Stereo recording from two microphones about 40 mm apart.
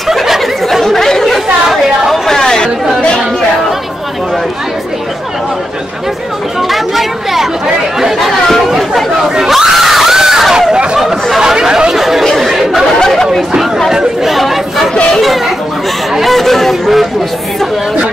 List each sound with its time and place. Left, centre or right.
0.1 s chatter: centre
0.8 s chatter: centre
2.3 s chatter: centre
6.7 s a sound: centre
8.2 s screaming: centre
11.5 s chatter: centre
12.0 s chatter: centre
13.1 s chatter: centre
13.8 s chatter: centre
16.2 s a sound: centre